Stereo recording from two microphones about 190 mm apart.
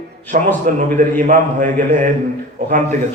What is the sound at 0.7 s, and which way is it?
A man's voice, 45° right (ahead or behind).